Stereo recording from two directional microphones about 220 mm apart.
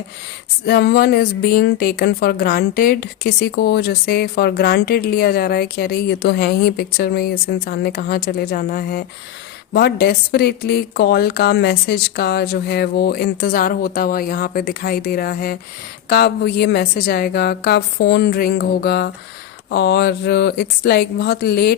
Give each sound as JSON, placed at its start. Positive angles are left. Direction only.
{"t": 0.6, "sound": "speech", "side_deg": 45}